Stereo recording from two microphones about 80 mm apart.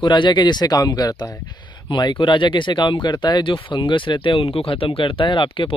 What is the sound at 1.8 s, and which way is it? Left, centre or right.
Speech, left.